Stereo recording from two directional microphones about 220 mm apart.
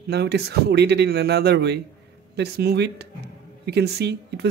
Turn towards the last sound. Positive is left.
turn(degrees=-50)  # may be behind; listen again after turning